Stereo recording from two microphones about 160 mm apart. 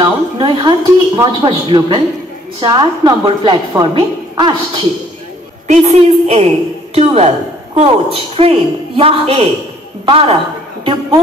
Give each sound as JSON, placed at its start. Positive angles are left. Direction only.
{"t": 0.0, "sound": "a woman's voice", "side_deg": -30}
{"t": 5.7, "sound": "a woman's voice", "side_deg": -40}